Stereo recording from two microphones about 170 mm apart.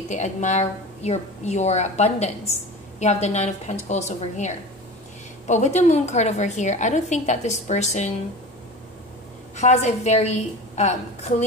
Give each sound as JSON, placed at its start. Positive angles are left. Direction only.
{"t": 0.1, "sound": "a woman's voice", "side_deg": 45}
{"t": 9.6, "sound": "a woman's voice", "side_deg": 40}